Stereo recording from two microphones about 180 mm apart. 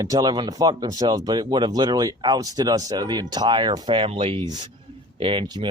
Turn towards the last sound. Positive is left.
turn(degrees=-25)  # may be behind; listen again after turning